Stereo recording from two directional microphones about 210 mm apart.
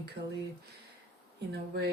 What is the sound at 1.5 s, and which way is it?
Speech, 50° right (ahead or behind).